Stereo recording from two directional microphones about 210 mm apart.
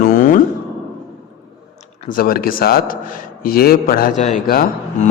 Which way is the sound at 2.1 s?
45° left (ahead or behind).